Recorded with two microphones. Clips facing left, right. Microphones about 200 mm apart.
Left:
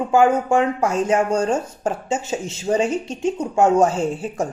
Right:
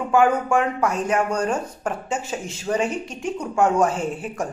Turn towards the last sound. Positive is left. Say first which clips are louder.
# left 4 dB
turn(degrees=25)  # may be behind; listen again after turning